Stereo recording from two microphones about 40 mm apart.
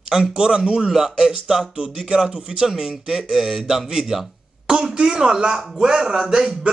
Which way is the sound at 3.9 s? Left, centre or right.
Centre.